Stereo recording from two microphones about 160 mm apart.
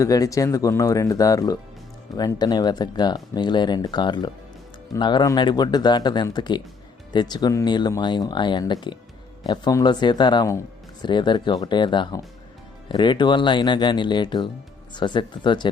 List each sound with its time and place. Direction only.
0.0 s speech: 20° left (ahead or behind)